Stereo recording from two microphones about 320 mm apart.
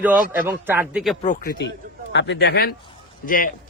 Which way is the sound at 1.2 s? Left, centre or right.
Left.